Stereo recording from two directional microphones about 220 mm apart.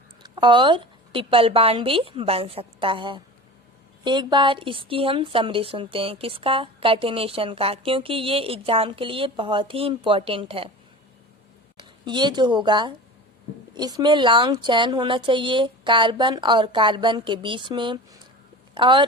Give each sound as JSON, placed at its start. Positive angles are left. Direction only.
{"t": 0.2, "sound": "a woman's voice", "side_deg": -20}
{"t": 11.8, "sound": "a woman's voice", "side_deg": -20}